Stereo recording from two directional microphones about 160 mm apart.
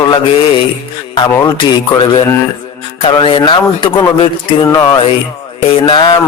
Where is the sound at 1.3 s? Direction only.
25° left (ahead or behind).